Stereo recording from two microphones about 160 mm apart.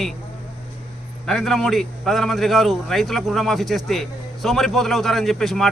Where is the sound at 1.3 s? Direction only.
Centre (ahead or behind).